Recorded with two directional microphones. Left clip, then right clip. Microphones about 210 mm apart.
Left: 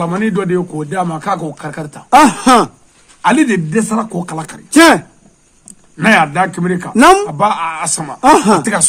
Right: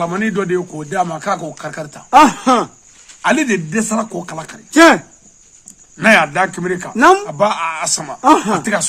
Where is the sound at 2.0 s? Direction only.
50° left (ahead or behind).